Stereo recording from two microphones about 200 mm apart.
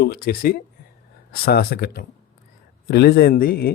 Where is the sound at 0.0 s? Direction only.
50° left (ahead or behind).